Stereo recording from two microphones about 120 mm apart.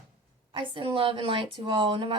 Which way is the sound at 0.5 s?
45° right (ahead or behind).